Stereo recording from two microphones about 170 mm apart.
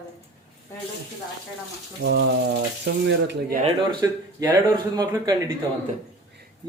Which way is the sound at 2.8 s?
85° right.